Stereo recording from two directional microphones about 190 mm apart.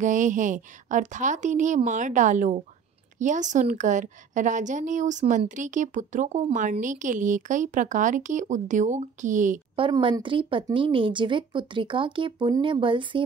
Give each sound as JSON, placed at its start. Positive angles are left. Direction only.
{"t": 0.0, "sound": "a woman's voice", "side_deg": -40}
{"t": 9.8, "sound": "speech", "side_deg": -25}